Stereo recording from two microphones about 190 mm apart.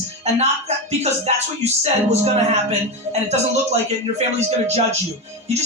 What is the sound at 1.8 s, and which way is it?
Speech, 35° right (ahead or behind).